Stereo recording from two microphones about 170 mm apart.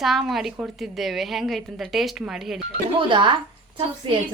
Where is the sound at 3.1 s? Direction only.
30° right (ahead or behind).